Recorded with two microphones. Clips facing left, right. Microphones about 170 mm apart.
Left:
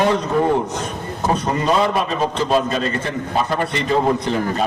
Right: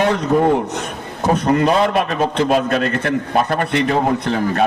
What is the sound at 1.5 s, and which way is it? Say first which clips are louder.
A man's voice: right 1 dB; 65° right (ahead or behind).